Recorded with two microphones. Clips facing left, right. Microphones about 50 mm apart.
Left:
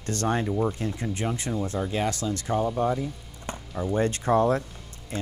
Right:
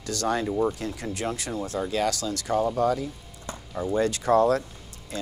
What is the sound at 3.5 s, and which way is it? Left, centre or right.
Speech, left.